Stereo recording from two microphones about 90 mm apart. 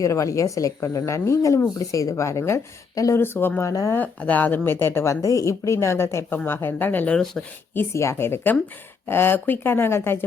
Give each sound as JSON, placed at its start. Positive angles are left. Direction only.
{"t": 0.0, "sound": "speech", "side_deg": 35}
{"t": 3.2, "sound": "a woman's voice", "side_deg": 25}
{"t": 3.7, "sound": "speech", "side_deg": 40}
{"t": 3.9, "sound": "a woman's voice", "side_deg": 15}
{"t": 5.2, "sound": "a woman's voice", "side_deg": 35}